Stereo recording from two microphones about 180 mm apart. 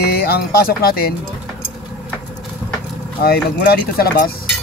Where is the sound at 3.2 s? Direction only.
60° left (ahead or behind).